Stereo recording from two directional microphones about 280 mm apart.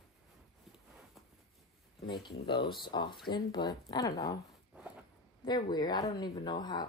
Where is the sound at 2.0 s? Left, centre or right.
Centre.